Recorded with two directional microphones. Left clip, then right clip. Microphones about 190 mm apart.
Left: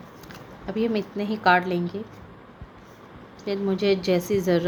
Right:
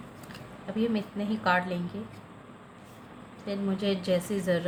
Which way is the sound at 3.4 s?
40° left (ahead or behind).